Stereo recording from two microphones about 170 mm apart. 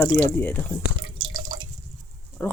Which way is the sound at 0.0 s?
10° left (ahead or behind).